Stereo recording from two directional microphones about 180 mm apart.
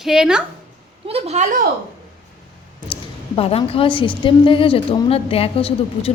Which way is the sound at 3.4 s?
30° left (ahead or behind).